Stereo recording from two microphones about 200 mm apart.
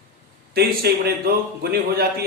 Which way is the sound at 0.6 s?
50° right (ahead or behind).